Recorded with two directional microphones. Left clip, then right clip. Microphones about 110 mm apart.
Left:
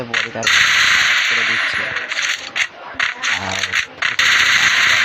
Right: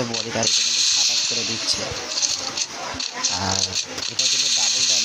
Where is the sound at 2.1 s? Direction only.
30° left (ahead or behind).